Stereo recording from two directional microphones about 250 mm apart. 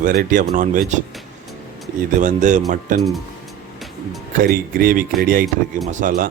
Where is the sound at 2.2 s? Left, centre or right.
Right.